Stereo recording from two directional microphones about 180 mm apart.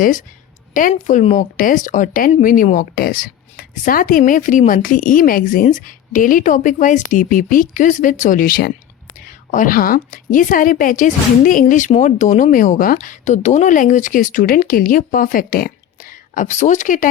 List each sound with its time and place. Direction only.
0.7 s speech: 45° left (ahead or behind)